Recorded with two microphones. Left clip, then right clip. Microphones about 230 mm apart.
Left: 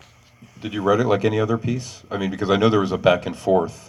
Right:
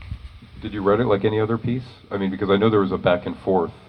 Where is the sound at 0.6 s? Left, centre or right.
Left.